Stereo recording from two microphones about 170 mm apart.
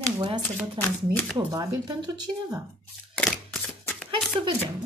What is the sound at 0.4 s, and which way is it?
Speech, 10° left (ahead or behind).